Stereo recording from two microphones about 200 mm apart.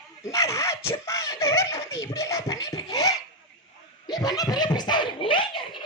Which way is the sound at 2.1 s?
15° left (ahead or behind).